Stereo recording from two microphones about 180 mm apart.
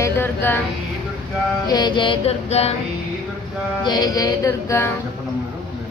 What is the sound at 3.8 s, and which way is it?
Music, 20° left (ahead or behind).